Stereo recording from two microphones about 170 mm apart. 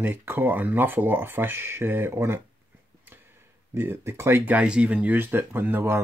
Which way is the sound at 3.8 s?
15° right (ahead or behind).